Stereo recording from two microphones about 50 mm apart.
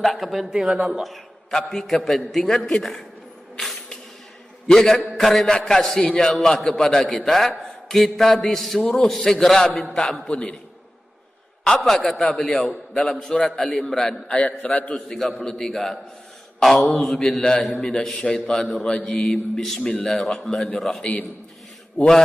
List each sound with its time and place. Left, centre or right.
0.0 s a man's voice: centre
4.6 s a man's voice: centre
11.6 s a man's voice: centre
12.3 s a man's voice: centre
12.9 s a man's voice: centre
14.3 s a man's voice: left
15.1 s a man's voice: centre